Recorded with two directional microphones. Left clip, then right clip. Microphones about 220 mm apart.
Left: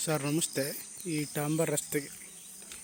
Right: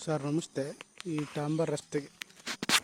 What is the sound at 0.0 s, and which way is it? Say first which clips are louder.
Speech: left 1 dB; centre (ahead or behind).